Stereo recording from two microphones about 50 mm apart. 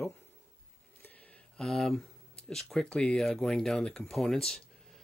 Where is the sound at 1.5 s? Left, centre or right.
Centre.